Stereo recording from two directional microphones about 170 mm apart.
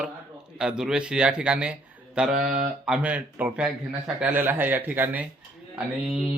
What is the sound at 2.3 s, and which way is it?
Mantra, 50° right (ahead or behind).